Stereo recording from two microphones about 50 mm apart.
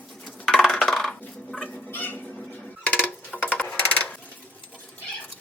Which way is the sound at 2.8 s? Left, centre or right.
Left.